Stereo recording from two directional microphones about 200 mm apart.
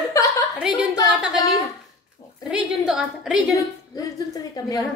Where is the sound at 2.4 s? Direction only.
5° right (ahead or behind).